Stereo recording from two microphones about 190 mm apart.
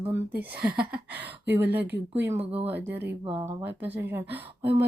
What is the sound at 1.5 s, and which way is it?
Speech, 10° right (ahead or behind).